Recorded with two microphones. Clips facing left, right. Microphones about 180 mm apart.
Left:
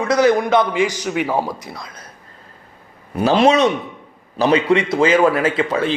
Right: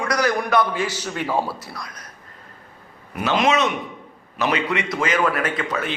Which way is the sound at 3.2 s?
30° left (ahead or behind).